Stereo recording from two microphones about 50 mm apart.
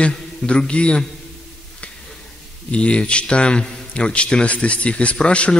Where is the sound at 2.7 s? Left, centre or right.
Left.